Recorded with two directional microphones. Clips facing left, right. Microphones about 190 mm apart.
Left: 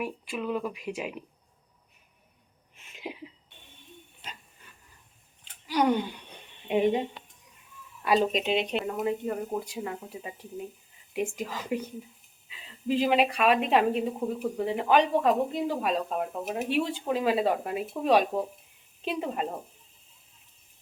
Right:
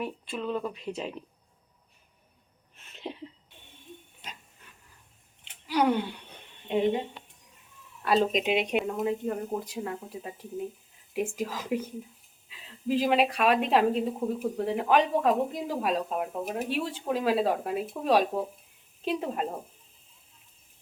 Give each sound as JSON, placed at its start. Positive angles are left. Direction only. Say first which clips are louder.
{"t": 0.3, "sound": "speech", "louder": "left 1 dB", "side_deg": 10}
{"t": 2.7, "sound": "a sound", "louder": "right 1 dB", "side_deg": 10}
{"t": 5.6, "sound": "speech", "louder": "even", "side_deg": -10}
{"t": 6.3, "sound": "a sound", "louder": "left 2 dB", "side_deg": 15}
{"t": 8.0, "sound": "speech", "louder": "even", "side_deg": 5}
{"t": 8.4, "sound": "speech", "louder": "right 1 dB", "side_deg": -10}
{"t": 8.8, "sound": "speech", "louder": "even", "side_deg": 0}